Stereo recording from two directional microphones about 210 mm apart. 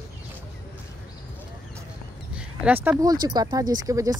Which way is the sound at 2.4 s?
10° right (ahead or behind).